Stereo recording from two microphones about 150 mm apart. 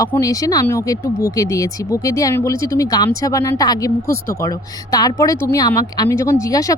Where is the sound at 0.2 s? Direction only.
25° left (ahead or behind).